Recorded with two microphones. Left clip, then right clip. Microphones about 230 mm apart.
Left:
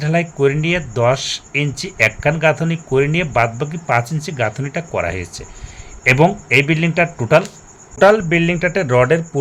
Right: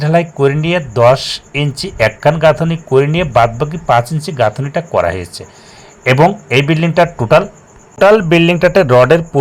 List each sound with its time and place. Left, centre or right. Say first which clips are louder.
0.0 s speech: right 4 dB; centre